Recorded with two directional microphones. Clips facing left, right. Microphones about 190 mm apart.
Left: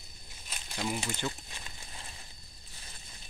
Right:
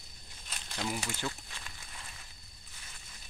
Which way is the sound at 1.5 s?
25° left (ahead or behind).